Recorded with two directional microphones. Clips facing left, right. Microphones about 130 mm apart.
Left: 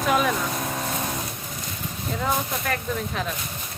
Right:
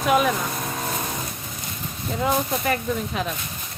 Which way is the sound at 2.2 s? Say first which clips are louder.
Right 4 dB; 5° right (ahead or behind).